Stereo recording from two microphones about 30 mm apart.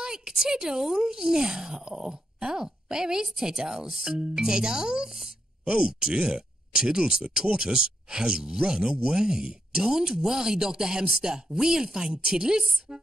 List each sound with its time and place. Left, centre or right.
0.0 s a woman's voice: right